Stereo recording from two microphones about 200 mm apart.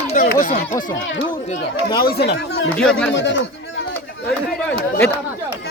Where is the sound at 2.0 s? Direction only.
55° left (ahead or behind).